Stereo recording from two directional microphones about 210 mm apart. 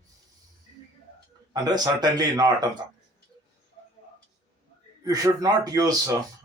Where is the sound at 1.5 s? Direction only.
20° right (ahead or behind).